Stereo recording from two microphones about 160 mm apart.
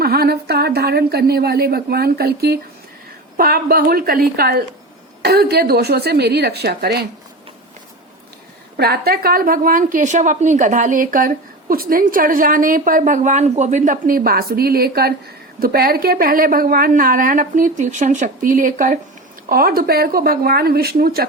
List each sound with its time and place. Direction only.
0.0 s a woman's voice: 75° right (ahead or behind)
5.2 s a woman's voice: 85° right
8.8 s speech: 80° right; by 18.9 s 55° right (ahead or behind)
19.5 s a woman's voice: 65° right (ahead or behind)